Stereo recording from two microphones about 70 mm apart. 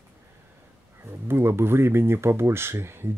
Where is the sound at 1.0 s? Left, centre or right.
Right.